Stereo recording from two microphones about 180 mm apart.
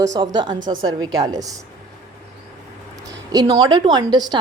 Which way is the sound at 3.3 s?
20° right (ahead or behind).